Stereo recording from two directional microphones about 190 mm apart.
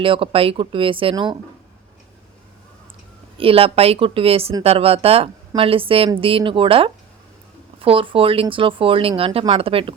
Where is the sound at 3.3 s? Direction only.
30° right (ahead or behind).